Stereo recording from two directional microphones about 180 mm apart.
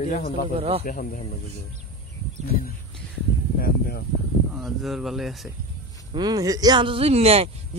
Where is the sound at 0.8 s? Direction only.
50° left (ahead or behind).